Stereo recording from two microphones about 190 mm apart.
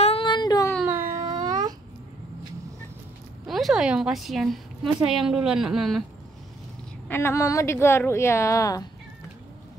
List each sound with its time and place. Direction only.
0.0 s a sound: 30° left (ahead or behind)
0.8 s baby cry: 15° right (ahead or behind)
3.4 s a woman's voice: centre (ahead or behind)
7.1 s a woman's voice: 10° left (ahead or behind)